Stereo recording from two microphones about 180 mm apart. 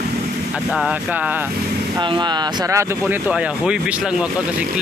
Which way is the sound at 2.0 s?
25° right (ahead or behind).